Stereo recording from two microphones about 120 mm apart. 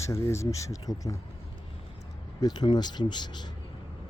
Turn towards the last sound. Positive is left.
turn(degrees=40)  # may be behind; listen again after turning